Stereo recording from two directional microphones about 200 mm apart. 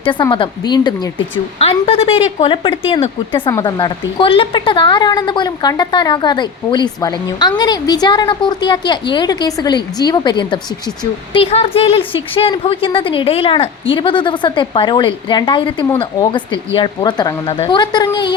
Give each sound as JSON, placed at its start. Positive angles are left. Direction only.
{"t": 0.0, "sound": "a woman's voice", "side_deg": 25}